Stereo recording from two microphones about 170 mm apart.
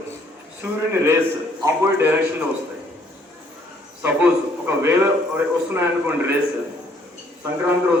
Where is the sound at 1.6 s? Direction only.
20° right (ahead or behind).